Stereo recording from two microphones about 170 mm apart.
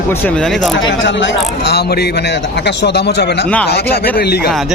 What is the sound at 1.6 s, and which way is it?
A man's voice, 75° left (ahead or behind).